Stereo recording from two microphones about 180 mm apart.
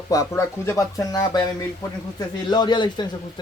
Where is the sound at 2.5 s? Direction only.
25° left (ahead or behind).